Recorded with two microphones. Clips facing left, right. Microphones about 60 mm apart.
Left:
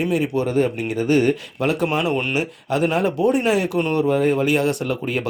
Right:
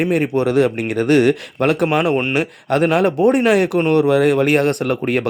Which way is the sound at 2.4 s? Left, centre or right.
Right.